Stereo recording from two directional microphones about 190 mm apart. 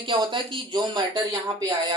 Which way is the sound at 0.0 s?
25° right (ahead or behind).